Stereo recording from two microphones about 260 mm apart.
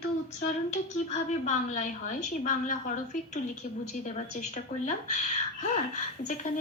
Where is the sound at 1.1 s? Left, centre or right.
Left.